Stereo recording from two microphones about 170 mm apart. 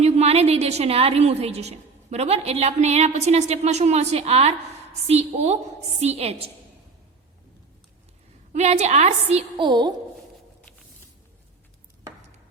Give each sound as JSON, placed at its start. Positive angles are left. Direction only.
{"t": 0.0, "sound": "a woman's voice", "side_deg": -40}
{"t": 8.5, "sound": "a woman's voice", "side_deg": -40}